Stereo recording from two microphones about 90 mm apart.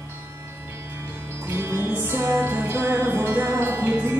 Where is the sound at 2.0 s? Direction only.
25° right (ahead or behind).